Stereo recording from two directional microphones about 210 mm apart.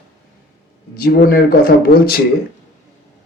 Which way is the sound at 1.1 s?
45° left (ahead or behind).